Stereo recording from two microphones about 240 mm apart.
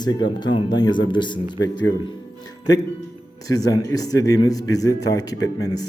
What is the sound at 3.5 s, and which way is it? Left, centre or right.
A man's voice, centre.